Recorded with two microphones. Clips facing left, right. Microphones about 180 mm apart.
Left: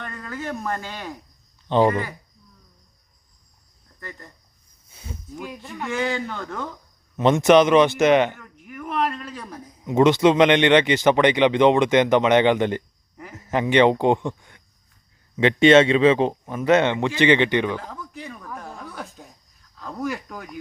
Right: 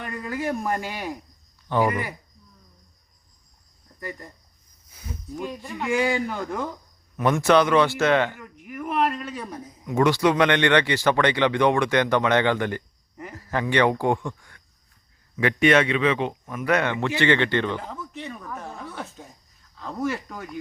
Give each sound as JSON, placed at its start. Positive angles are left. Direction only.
{"t": 0.0, "sound": "speech", "side_deg": -15}
{"t": 1.6, "sound": "speech", "side_deg": 25}
{"t": 4.9, "sound": "a sound", "side_deg": 25}
{"t": 5.4, "sound": "speech", "side_deg": 0}
{"t": 7.2, "sound": "speech", "side_deg": 20}
{"t": 8.4, "sound": "speech", "side_deg": -5}
{"t": 9.8, "sound": "speech", "side_deg": 20}
{"t": 17.7, "sound": "speech", "side_deg": -5}